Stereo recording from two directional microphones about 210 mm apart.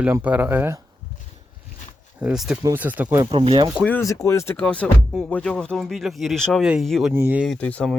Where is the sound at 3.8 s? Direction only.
5° left (ahead or behind).